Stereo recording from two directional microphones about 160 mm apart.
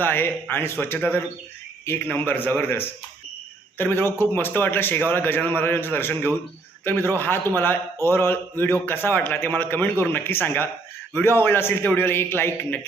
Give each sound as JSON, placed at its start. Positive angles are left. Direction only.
{"t": 0.0, "sound": "a man's voice", "side_deg": 10}